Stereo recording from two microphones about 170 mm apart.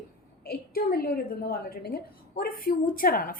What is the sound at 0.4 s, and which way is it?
A woman's voice, 60° left (ahead or behind).